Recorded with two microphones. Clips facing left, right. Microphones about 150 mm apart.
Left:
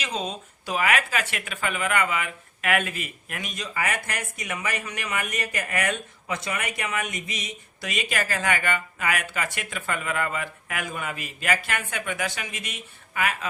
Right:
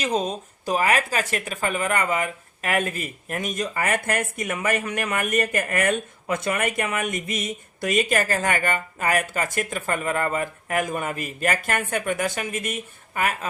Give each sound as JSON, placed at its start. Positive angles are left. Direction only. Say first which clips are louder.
{"t": 0.0, "sound": "speech", "louder": "right 6 dB", "side_deg": -45}